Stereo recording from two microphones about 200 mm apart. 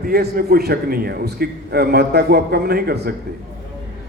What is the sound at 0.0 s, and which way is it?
A man's voice, 50° right (ahead or behind).